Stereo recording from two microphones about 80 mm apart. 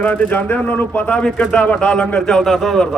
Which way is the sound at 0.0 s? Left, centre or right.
Centre.